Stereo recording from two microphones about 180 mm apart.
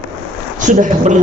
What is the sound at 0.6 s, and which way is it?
Speech, 45° right (ahead or behind).